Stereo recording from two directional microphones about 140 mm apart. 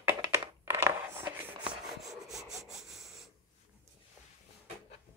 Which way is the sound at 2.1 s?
Centre (ahead or behind).